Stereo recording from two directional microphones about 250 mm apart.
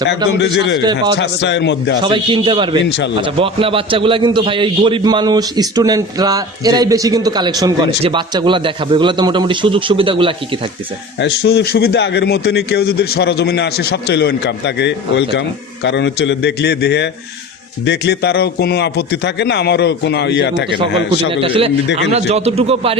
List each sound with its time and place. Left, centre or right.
0.3 s a man's voice: left
2.0 s a man's voice: centre
11.2 s a man's voice: left
21.2 s a man's voice: right